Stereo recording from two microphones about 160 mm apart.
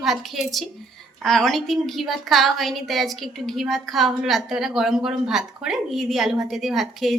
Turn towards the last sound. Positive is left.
turn(degrees=0)  # may be behind; listen again after turning